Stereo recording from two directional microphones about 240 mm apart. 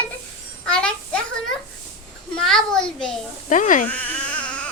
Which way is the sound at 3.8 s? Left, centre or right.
Centre.